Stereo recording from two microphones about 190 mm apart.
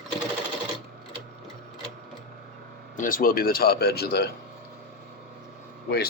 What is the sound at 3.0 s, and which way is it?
Speech, 45° left (ahead or behind).